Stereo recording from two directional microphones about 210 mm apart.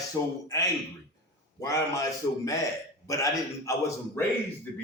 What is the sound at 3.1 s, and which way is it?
A man's voice, 15° left (ahead or behind).